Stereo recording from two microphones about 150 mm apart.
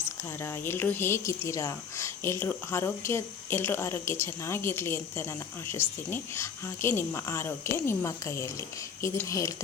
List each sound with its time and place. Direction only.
0.4 s speech: 15° left (ahead or behind)